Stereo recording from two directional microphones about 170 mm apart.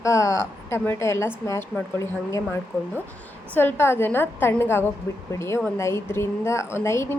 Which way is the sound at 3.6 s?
15° left (ahead or behind).